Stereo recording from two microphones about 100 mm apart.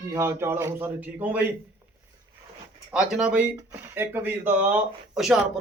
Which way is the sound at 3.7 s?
25° right (ahead or behind).